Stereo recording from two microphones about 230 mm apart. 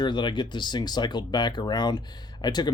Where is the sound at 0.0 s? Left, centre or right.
Centre.